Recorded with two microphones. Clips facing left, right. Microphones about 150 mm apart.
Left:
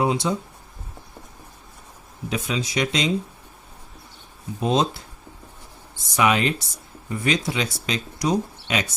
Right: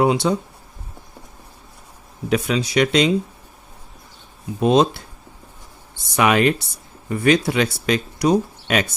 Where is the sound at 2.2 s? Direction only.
65° right (ahead or behind).